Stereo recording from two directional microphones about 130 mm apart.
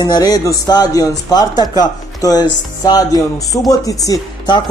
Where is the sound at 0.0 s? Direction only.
30° left (ahead or behind).